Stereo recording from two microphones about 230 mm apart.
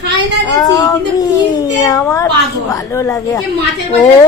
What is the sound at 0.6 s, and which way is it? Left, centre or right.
A woman's voice, centre.